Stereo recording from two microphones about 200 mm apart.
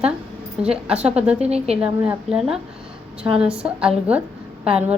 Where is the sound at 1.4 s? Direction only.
30° right (ahead or behind).